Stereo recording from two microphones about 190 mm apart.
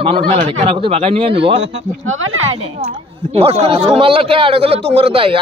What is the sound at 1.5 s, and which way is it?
Speech, 90° right.